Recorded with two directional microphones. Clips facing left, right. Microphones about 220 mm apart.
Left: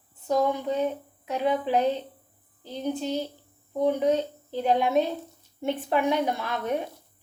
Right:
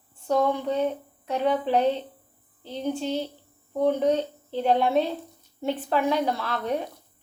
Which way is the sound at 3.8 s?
10° left (ahead or behind).